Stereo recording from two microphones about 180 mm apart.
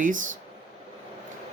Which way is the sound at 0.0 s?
45° right (ahead or behind).